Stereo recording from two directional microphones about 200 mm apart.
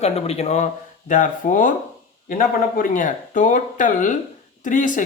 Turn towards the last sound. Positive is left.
turn(degrees=40)  # may be behind; listen again after turning